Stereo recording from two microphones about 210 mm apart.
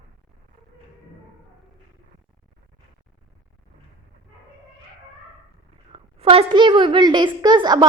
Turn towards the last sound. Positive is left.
turn(degrees=-20)  # may be behind; listen again after turning